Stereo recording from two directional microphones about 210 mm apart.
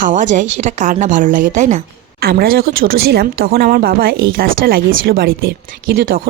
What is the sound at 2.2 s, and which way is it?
A woman's voice, 45° right (ahead or behind).